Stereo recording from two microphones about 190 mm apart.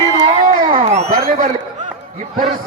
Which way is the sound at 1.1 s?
50° right (ahead or behind).